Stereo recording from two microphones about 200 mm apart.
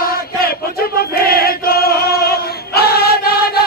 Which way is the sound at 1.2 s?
50° left (ahead or behind).